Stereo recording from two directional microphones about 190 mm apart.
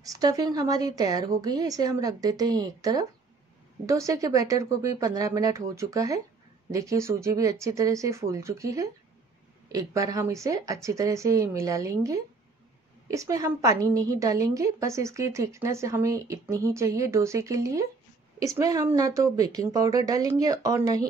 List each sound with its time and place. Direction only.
0.0 s a woman's voice: 20° right (ahead or behind)